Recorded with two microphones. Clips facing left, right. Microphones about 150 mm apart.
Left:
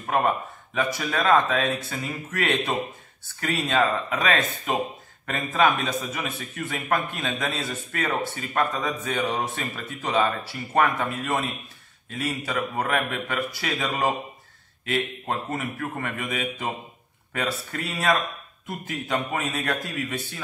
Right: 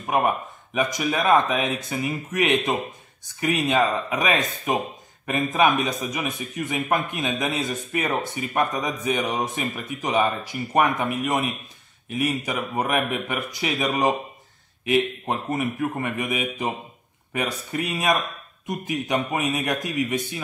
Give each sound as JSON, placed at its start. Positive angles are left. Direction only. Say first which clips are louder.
{"t": 0.0, "sound": "a man's voice", "louder": "right 1 dB", "side_deg": -15}